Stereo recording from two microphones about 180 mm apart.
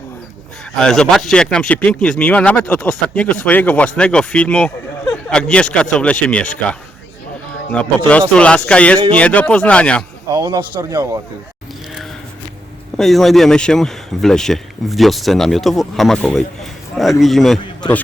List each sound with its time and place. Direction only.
0.8 s speech: 5° left (ahead or behind)
10.3 s speech: 25° right (ahead or behind)
13.0 s speech: centre (ahead or behind)